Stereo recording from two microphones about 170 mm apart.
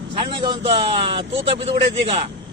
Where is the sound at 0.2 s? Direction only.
30° right (ahead or behind).